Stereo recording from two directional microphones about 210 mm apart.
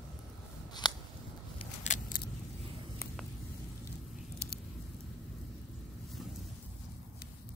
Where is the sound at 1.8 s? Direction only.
35° left (ahead or behind).